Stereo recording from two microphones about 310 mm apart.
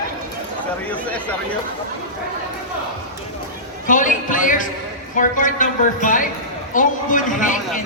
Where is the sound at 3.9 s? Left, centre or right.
Left.